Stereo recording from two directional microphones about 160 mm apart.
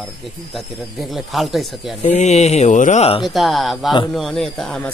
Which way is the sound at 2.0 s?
45° left (ahead or behind).